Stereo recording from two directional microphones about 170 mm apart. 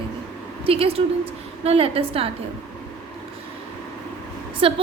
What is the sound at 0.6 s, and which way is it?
A woman's voice, 35° right (ahead or behind).